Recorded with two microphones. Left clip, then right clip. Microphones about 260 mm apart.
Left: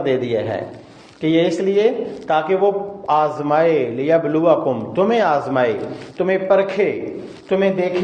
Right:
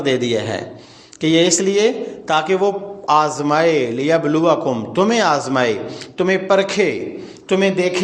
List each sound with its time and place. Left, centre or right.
0.0 s a man's voice: right